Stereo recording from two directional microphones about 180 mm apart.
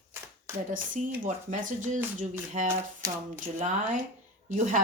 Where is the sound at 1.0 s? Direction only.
45° right (ahead or behind).